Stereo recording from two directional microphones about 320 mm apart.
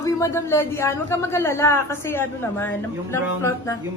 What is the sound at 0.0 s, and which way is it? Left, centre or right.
A man's voice, centre.